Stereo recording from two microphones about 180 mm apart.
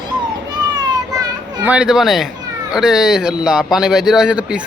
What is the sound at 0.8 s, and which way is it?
Children playing, 20° right (ahead or behind).